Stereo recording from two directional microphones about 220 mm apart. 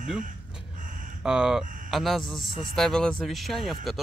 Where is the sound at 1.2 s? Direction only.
5° right (ahead or behind).